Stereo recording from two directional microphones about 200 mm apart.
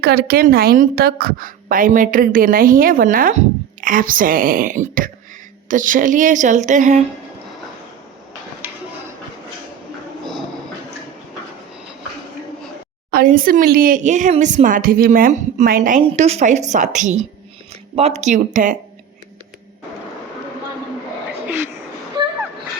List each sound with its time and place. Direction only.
0.0 s a woman's voice: 50° right (ahead or behind)
8.6 s a sound: 10° right (ahead or behind)
13.1 s a woman's voice: 45° right (ahead or behind)
16.0 s speech: 30° right (ahead or behind)